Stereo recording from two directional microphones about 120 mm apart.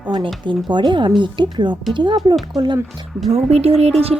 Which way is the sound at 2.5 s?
Centre (ahead or behind).